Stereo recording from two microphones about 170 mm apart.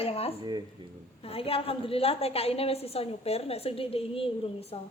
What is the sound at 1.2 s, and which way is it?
A woman's voice, 35° left (ahead or behind).